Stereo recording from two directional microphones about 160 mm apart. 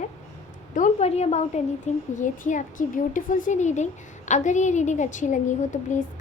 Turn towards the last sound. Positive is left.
turn(degrees=50)  # may be behind; listen again after turning